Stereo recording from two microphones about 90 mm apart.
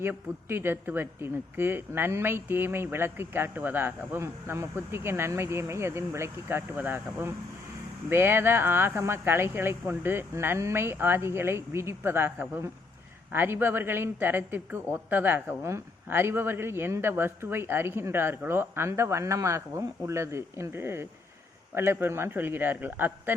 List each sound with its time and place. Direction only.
0.0 s speech: 25° right (ahead or behind)